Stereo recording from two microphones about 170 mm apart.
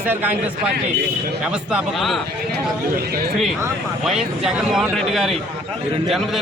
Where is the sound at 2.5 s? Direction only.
60° right (ahead or behind).